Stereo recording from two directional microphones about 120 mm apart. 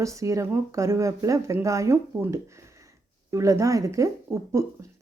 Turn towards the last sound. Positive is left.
turn(degrees=-25)  # may be behind; listen again after turning